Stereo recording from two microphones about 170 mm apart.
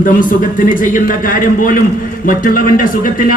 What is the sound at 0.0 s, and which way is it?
A man's voice, 50° left (ahead or behind).